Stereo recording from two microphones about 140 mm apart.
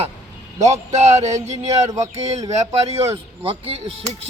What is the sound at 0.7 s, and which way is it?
Speech, 50° right (ahead or behind).